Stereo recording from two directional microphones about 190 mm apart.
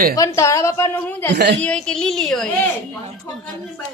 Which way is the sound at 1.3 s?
60° right (ahead or behind).